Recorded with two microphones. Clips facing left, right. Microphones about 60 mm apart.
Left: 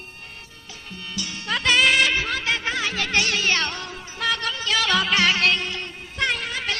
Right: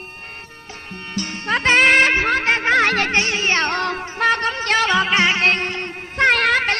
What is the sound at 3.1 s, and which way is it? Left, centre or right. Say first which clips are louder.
Music: right 3 dB; right.